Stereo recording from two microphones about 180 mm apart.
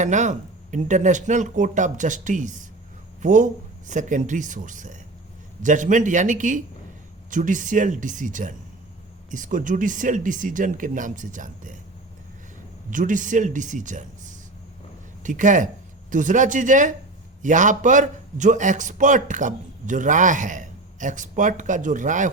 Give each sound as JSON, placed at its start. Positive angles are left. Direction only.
{"t": 0.0, "sound": "a man's voice", "side_deg": -40}
{"t": 12.9, "sound": "a man's voice", "side_deg": -45}